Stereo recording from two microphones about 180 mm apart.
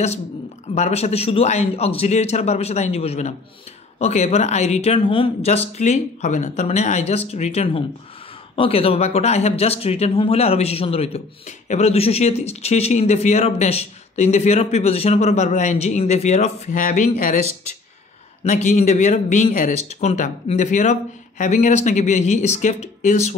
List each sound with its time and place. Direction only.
0.7 s speech: 40° left (ahead or behind)
18.4 s speech: 45° left (ahead or behind)